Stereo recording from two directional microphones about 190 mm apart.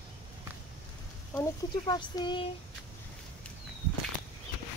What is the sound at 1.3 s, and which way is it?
Speech, 20° left (ahead or behind).